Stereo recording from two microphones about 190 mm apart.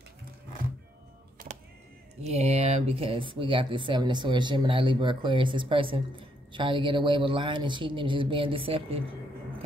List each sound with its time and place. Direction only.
2.2 s speech: 35° right (ahead or behind)